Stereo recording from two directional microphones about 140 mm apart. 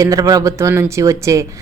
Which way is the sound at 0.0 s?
25° right (ahead or behind).